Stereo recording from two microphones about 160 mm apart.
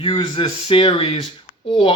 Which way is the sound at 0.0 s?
35° left (ahead or behind).